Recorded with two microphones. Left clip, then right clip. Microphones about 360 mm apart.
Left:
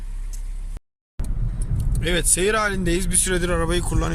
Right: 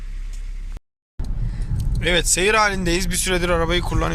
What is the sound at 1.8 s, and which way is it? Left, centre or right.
Speech, centre.